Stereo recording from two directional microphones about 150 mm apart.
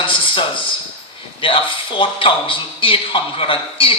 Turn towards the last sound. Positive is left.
turn(degrees=35)  # may be behind; listen again after turning